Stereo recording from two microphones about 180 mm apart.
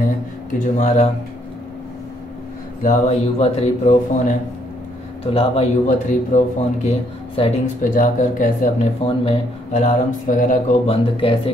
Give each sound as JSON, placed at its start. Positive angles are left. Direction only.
{"t": 0.7, "sound": "speech", "side_deg": 40}
{"t": 2.8, "sound": "speech", "side_deg": 40}
{"t": 10.9, "sound": "speech", "side_deg": 30}